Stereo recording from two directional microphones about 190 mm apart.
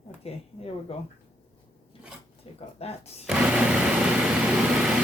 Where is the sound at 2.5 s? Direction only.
30° left (ahead or behind).